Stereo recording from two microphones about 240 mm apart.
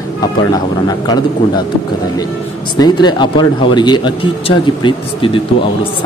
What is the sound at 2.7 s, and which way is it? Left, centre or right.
Speech, centre.